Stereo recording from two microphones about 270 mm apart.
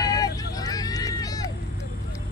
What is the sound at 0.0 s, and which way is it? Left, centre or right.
Vehicle, centre.